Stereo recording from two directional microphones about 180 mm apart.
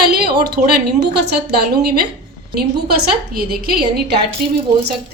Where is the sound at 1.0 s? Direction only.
65° right (ahead or behind).